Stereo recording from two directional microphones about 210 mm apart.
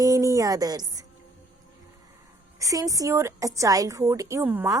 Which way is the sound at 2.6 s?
15° right (ahead or behind).